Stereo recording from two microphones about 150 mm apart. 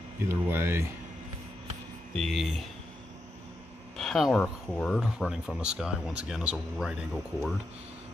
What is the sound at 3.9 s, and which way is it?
Speech, centre (ahead or behind).